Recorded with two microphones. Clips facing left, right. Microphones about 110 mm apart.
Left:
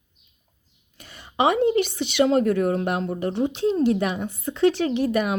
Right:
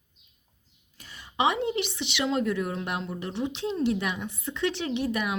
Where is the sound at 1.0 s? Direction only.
60° left (ahead or behind).